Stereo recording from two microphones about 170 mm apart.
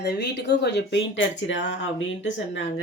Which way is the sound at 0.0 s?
75° left (ahead or behind).